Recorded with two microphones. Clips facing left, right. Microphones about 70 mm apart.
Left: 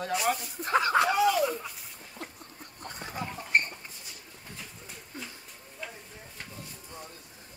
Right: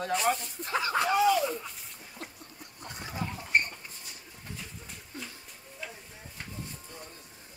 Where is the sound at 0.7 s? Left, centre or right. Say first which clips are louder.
Left 5 dB; left.